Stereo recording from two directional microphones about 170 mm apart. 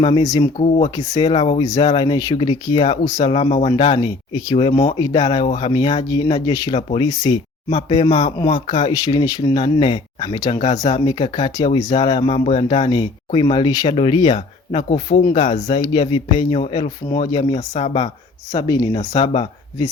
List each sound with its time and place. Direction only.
0.0 s speech: 25° left (ahead or behind)
1.6 s speech: 20° left (ahead or behind); by 15.8 s 45° left (ahead or behind)
15.8 s speech: 30° left (ahead or behind)
18.5 s speech: 20° left (ahead or behind)